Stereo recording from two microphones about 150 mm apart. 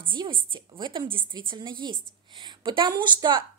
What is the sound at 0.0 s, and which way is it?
A woman's voice, 35° right (ahead or behind).